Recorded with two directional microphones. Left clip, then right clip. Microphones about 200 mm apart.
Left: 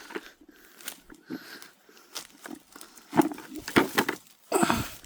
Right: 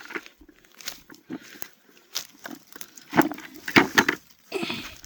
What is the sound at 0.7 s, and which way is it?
Biting, 45° right (ahead or behind).